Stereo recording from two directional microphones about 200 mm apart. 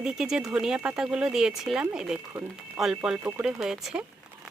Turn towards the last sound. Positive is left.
turn(degrees=-5)  # may be behind; listen again after turning